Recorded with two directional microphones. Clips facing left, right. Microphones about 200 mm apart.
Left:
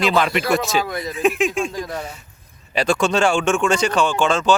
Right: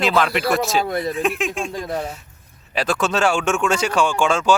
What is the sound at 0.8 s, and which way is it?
Speech, 30° right (ahead or behind).